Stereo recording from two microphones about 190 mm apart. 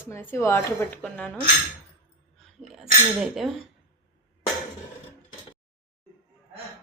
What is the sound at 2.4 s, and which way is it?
Speech, centre (ahead or behind).